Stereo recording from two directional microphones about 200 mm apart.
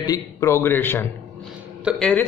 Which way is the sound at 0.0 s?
15° left (ahead or behind).